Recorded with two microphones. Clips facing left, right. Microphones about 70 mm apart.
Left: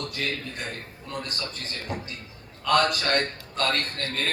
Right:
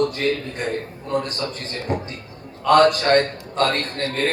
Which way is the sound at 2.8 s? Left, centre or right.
Right.